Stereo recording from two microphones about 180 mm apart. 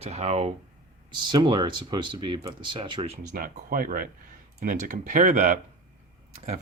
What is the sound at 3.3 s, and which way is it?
Speech, 50° right (ahead or behind).